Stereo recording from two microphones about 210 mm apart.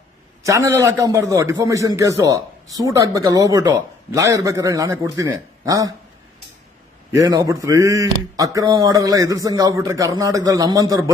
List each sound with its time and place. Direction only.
0.4 s a man's voice: 15° right (ahead or behind)
7.1 s a man's voice: 15° right (ahead or behind)